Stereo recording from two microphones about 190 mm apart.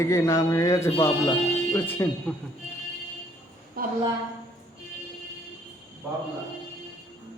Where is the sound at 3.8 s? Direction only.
50° right (ahead or behind).